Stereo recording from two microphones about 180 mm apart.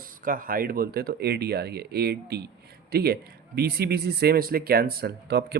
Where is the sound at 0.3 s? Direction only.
50° right (ahead or behind).